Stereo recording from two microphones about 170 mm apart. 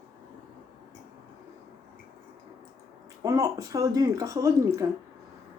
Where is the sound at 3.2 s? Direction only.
20° right (ahead or behind).